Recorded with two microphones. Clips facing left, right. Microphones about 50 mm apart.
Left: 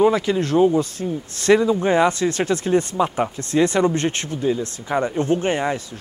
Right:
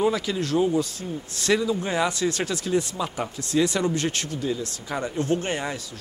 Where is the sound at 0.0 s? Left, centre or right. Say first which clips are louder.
Left 7 dB; left.